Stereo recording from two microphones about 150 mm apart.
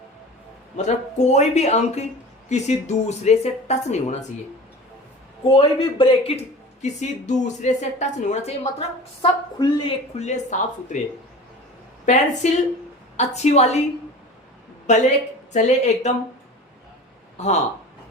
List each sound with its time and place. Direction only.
0.8 s a woman's voice: 50° left (ahead or behind)
5.5 s a man's voice: 35° left (ahead or behind)
6.8 s a woman's voice: 50° left (ahead or behind)
9.2 s a man's voice: 35° left (ahead or behind)
10.2 s a woman's voice: 50° left (ahead or behind)
12.0 s a woman's voice: 55° left (ahead or behind)
14.9 s a woman's voice: 55° left (ahead or behind)
17.3 s speech: 45° left (ahead or behind)